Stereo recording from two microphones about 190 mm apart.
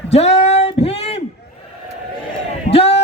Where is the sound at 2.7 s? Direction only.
30° left (ahead or behind).